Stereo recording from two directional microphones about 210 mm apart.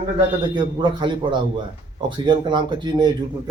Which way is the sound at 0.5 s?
20° right (ahead or behind).